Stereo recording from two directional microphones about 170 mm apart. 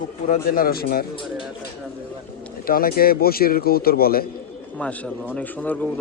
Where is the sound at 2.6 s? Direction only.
60° left (ahead or behind).